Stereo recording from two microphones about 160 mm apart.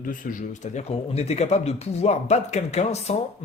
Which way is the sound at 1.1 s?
40° left (ahead or behind).